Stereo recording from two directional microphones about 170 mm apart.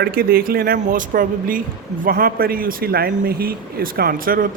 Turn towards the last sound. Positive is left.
turn(degrees=-55)  # may be behind; listen again after turning